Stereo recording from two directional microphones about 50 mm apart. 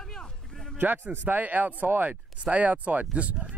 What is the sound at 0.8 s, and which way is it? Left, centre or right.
Speech, right.